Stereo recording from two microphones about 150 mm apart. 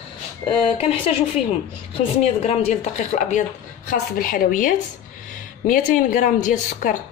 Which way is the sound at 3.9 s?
70° left (ahead or behind).